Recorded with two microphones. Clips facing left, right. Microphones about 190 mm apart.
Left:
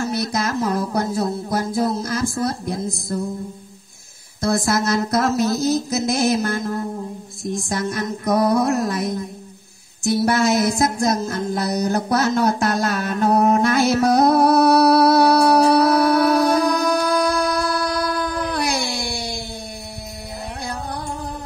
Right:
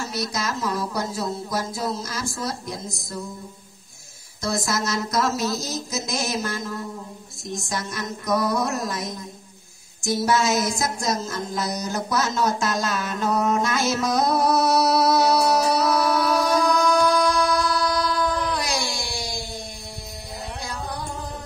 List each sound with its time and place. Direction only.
0.0 s speech: 55° left (ahead or behind)
4.4 s speech: 55° left (ahead or behind)
10.0 s music: 60° left (ahead or behind)
20.6 s music: 60° left (ahead or behind)